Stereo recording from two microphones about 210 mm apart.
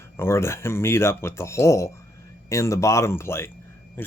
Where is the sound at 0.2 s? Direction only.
10° left (ahead or behind).